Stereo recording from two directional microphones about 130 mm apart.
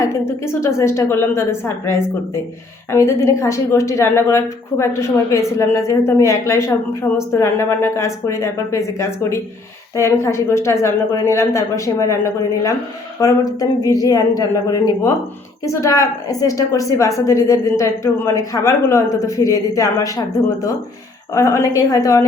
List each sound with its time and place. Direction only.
0.0 s a woman's voice: 20° left (ahead or behind)
13.1 s a woman's voice: 25° left (ahead or behind)
21.3 s a woman's voice: 25° left (ahead or behind)